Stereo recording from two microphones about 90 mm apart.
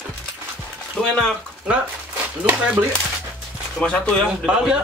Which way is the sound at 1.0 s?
10° left (ahead or behind).